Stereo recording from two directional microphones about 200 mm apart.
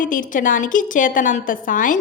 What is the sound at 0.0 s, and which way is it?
A woman's voice, 40° left (ahead or behind).